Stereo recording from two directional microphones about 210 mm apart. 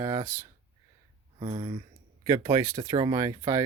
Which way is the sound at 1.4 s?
25° right (ahead or behind).